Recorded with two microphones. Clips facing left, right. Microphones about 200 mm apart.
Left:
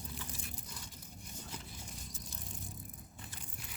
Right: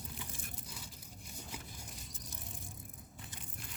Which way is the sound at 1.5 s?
10° right (ahead or behind).